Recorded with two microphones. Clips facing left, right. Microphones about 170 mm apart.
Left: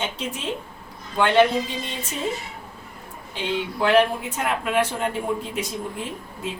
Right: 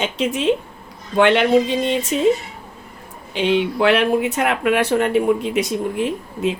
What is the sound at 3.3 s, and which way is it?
A woman's voice, 75° right (ahead or behind).